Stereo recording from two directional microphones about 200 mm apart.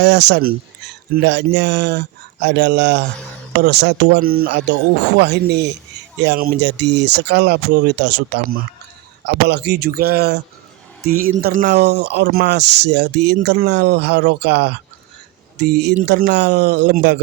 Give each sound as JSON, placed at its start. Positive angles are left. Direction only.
{"t": 0.0, "sound": "speech", "side_deg": -60}